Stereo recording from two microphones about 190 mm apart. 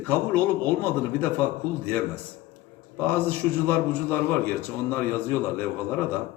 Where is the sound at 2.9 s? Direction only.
10° left (ahead or behind).